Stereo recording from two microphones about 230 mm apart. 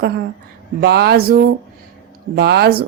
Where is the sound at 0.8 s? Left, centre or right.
Right.